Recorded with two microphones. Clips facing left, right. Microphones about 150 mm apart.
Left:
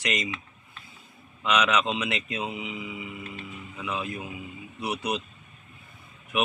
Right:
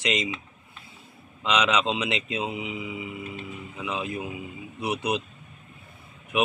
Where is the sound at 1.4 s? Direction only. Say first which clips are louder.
Even; 20° right (ahead or behind).